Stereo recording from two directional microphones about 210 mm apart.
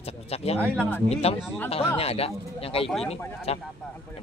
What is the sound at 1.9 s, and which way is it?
Speech, 30° left (ahead or behind).